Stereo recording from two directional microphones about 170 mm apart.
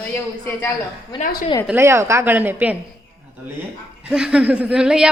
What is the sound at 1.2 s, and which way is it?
Speech, 55° left (ahead or behind).